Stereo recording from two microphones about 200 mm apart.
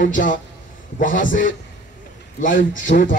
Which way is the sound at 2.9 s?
40° left (ahead or behind).